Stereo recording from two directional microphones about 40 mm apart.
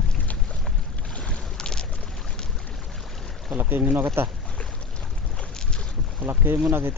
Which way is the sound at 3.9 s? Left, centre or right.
Right.